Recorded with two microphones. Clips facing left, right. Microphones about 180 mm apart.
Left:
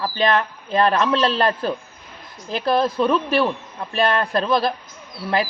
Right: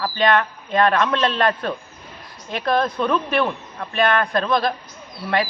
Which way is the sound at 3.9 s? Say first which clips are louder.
Even; 30° left (ahead or behind).